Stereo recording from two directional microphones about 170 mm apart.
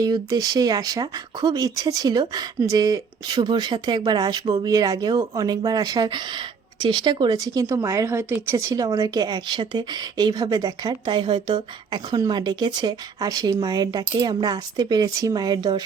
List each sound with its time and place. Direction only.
0.0 s speech: 20° right (ahead or behind)